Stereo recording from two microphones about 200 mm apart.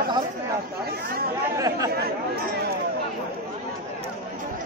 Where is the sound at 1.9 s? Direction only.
50° right (ahead or behind).